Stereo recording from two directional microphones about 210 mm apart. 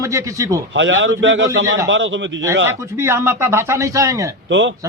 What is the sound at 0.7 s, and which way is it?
A man's voice, 60° right (ahead or behind).